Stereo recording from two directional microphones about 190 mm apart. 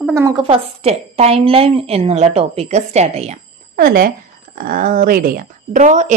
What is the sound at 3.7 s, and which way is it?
Speech, 50° right (ahead or behind).